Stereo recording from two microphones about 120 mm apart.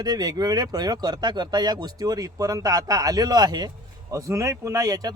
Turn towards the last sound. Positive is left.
turn(degrees=-30)  # may be behind; listen again after turning